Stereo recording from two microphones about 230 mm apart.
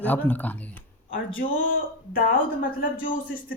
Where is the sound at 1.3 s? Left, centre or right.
Left.